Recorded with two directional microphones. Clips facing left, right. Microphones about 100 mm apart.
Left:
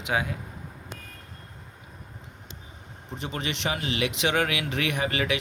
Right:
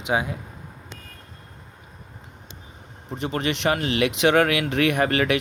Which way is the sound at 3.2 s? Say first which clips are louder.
Right 7 dB; 55° right (ahead or behind).